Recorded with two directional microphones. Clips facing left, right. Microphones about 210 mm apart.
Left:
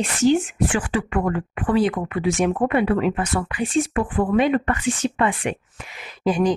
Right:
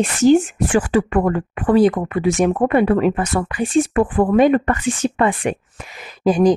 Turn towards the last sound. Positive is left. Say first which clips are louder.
# right 5 dB
turn(degrees=-40)  # may be behind; listen again after turning